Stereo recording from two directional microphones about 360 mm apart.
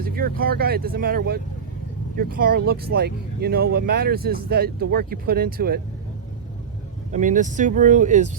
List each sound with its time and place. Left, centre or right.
0.0 s speech: right
7.1 s speech: right